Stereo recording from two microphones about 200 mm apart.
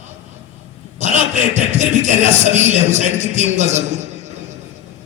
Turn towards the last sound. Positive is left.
turn(degrees=-35)  # may be behind; listen again after turning